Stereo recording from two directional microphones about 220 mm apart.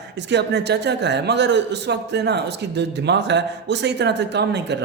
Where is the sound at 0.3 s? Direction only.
50° right (ahead or behind).